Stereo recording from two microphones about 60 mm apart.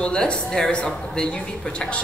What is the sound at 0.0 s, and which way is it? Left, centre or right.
A woman's voice, centre.